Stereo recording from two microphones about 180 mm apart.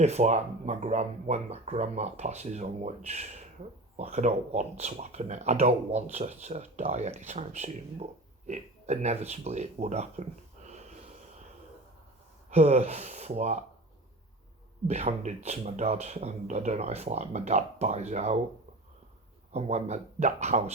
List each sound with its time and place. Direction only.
0.0 s speech: 40° right (ahead or behind)
12.5 s speech: 40° right (ahead or behind)
14.8 s speech: 40° right (ahead or behind)
19.5 s speech: 35° right (ahead or behind)